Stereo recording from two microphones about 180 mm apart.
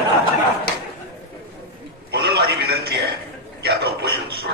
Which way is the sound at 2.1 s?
65° right (ahead or behind).